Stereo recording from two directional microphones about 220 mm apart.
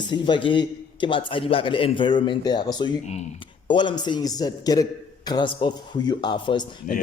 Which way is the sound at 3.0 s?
30° left (ahead or behind).